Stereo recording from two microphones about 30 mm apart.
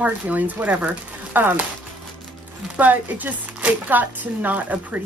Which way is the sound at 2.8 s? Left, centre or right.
Right.